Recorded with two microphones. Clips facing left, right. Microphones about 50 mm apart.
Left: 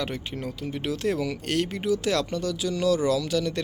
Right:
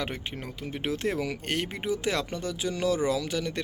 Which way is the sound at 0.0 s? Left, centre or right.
Centre.